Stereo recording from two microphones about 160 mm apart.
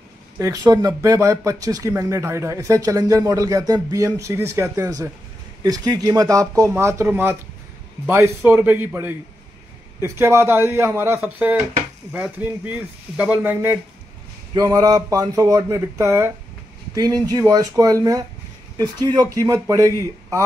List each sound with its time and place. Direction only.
0.4 s speech: 20° right (ahead or behind)
8.5 s speech: 10° right (ahead or behind)
14.5 s speech: 25° right (ahead or behind)